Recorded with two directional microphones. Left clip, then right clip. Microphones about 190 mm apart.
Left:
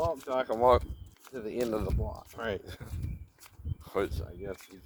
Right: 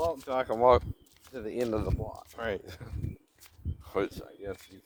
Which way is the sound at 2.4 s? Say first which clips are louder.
Right 1 dB; 20° left (ahead or behind).